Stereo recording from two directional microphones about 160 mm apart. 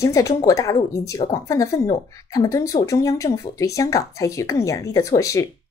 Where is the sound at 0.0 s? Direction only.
20° left (ahead or behind).